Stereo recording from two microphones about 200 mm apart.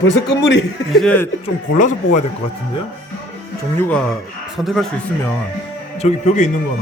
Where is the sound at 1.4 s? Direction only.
35° left (ahead or behind).